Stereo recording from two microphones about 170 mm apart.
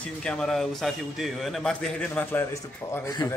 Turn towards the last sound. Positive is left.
turn(degrees=20)  # may be behind; listen again after turning